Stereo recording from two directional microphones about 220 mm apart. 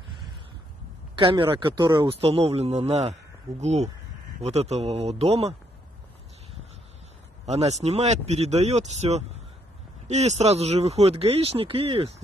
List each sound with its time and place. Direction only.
1.1 s a man's voice: 20° right (ahead or behind)
7.4 s a man's voice: 30° right (ahead or behind)